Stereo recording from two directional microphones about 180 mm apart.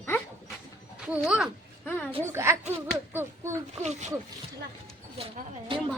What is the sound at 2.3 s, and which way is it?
A woman's voice, 15° right (ahead or behind).